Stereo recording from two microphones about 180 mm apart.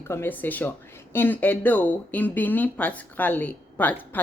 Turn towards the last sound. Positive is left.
turn(degrees=10)  # may be behind; listen again after turning